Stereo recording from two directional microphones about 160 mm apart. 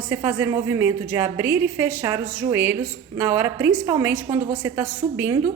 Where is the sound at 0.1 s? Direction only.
10° right (ahead or behind).